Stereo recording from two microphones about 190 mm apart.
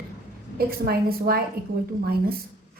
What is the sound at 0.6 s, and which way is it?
A woman's voice, 55° right (ahead or behind).